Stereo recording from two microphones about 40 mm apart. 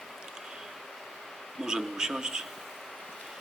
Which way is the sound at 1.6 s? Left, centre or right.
Centre.